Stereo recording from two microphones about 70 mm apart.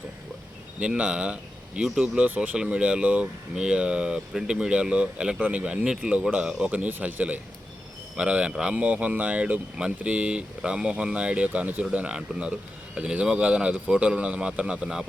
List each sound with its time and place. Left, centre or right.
0.8 s speech: centre